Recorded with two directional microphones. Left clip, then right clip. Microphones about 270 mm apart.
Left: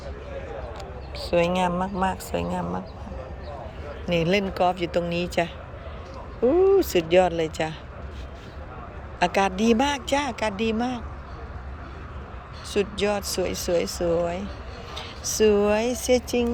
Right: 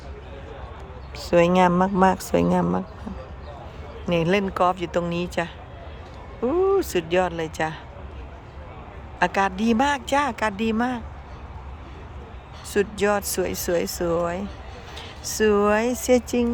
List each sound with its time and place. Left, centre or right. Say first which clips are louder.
1.5 s speech: right 6 dB; right
4.1 s a woman's voice: right 1 dB; centre
6.7 s a sound: left 2 dB; centre
7.1 s a woman's voice: left 5 dB; centre
9.1 s a woman's voice: right 1 dB; centre
12.7 s a woman's voice: right 3 dB; centre